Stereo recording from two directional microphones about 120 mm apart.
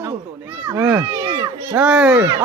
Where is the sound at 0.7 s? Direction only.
25° right (ahead or behind).